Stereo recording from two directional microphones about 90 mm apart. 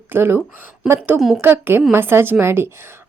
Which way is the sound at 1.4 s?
25° right (ahead or behind).